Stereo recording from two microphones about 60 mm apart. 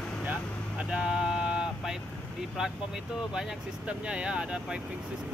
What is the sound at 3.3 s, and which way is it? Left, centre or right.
Speech, centre.